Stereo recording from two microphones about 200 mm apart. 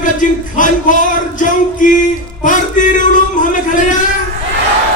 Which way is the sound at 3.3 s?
40° left (ahead or behind).